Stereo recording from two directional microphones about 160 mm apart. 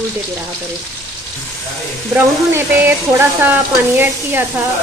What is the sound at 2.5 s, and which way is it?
Speech, 15° right (ahead or behind).